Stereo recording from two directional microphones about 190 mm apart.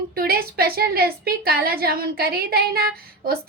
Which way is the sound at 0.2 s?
50° right (ahead or behind).